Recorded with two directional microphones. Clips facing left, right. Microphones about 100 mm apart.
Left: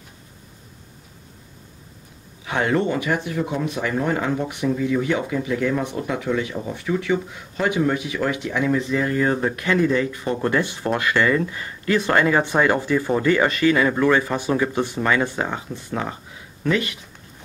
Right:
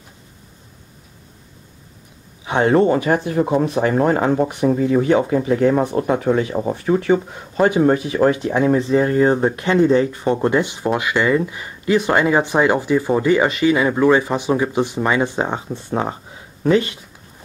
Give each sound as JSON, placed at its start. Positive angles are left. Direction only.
{"t": 2.4, "sound": "speech", "side_deg": -30}